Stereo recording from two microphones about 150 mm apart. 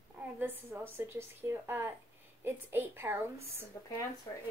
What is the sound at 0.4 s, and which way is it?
Speech, 15° right (ahead or behind).